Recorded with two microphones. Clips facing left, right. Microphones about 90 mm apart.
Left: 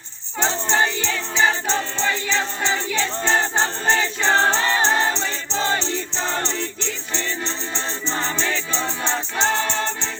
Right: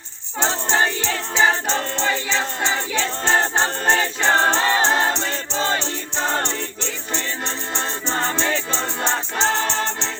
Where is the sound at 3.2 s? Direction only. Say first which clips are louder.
Right 2 dB; 60° right (ahead or behind).